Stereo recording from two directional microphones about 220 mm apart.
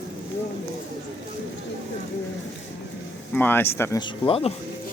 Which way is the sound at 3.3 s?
10° left (ahead or behind).